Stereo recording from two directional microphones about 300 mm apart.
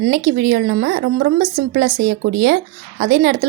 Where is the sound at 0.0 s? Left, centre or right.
Right.